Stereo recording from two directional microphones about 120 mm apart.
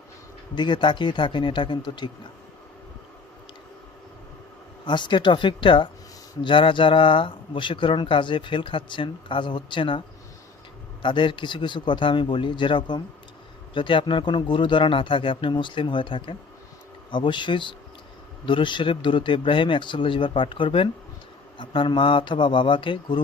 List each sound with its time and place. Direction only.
0.5 s a man's voice: 40° left (ahead or behind)
4.9 s a man's voice: 40° left (ahead or behind)
11.0 s a man's voice: 45° left (ahead or behind)